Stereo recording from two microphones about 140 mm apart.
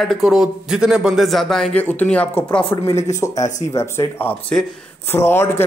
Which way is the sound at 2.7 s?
25° left (ahead or behind).